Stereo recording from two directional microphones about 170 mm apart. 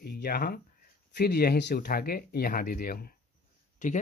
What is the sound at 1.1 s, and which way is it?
Speech, 70° left (ahead or behind).